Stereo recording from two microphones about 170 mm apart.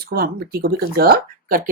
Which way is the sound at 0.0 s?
65° right (ahead or behind).